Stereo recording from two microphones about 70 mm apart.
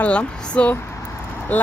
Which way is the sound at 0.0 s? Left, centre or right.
Centre.